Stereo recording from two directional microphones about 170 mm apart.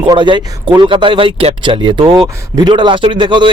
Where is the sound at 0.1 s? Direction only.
25° right (ahead or behind).